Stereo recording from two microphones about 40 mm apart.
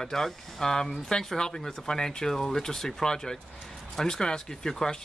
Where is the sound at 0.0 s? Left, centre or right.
Centre.